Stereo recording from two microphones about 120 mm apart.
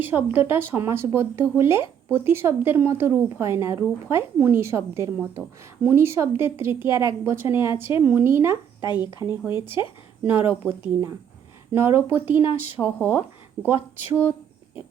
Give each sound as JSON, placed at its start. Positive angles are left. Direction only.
{"t": 0.0, "sound": "a woman's voice", "side_deg": -15}
{"t": 8.8, "sound": "speech", "side_deg": 35}
{"t": 10.6, "sound": "a woman's voice", "side_deg": -20}